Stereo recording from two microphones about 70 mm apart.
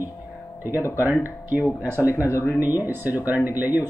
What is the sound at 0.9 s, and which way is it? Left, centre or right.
Speech, right.